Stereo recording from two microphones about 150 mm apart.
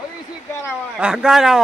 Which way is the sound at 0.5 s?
15° left (ahead or behind).